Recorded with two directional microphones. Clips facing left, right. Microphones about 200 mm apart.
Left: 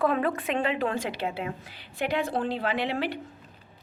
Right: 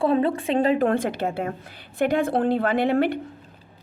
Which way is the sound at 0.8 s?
50° right (ahead or behind).